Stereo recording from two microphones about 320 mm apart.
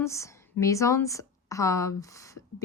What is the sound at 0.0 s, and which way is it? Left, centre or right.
A woman's voice, centre.